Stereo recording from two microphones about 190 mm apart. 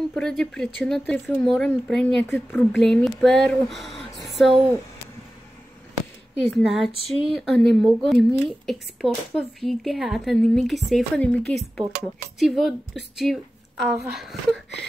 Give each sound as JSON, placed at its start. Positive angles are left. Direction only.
{"t": 0.1, "sound": "a woman's voice", "side_deg": 5}
{"t": 6.5, "sound": "speech", "side_deg": 0}
{"t": 6.9, "sound": "a sound", "side_deg": 30}
{"t": 7.3, "sound": "speech", "side_deg": 0}